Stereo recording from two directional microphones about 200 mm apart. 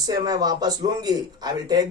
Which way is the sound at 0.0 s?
20° right (ahead or behind).